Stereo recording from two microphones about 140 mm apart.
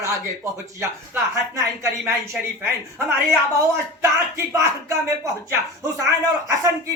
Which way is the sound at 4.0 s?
20° right (ahead or behind).